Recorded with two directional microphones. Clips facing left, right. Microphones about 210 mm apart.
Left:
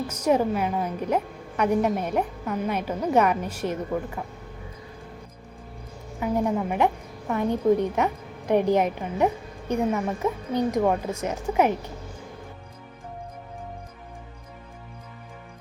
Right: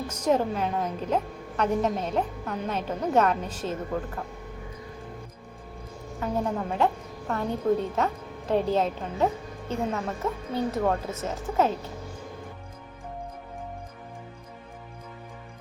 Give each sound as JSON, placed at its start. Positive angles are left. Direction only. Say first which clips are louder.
{"t": 0.1, "sound": "a woman's voice", "louder": "left 2 dB", "side_deg": 10}
{"t": 6.1, "sound": "a woman's voice", "louder": "left 4 dB", "side_deg": 10}